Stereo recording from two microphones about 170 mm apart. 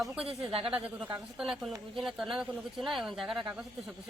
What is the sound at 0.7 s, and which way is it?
Speech, 5° right (ahead or behind).